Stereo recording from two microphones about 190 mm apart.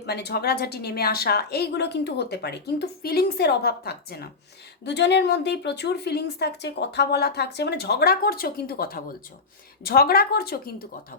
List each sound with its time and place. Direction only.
0.0 s a woman's voice: 60° left (ahead or behind)